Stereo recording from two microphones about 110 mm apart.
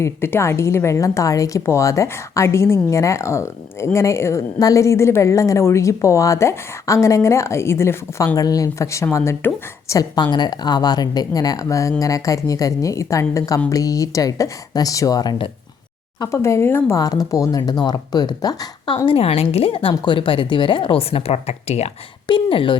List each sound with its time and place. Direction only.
0.0 s speech: 25° left (ahead or behind)
8.4 s speech: 35° left (ahead or behind)
17.0 s speech: 35° left (ahead or behind)
19.0 s a woman's voice: 60° left (ahead or behind); by 21.9 s 75° left (ahead or behind)
22.3 s speech: 50° left (ahead or behind)